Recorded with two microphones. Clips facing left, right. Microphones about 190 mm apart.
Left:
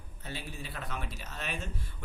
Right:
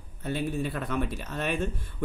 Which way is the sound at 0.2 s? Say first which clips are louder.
Right 13 dB; 55° right (ahead or behind).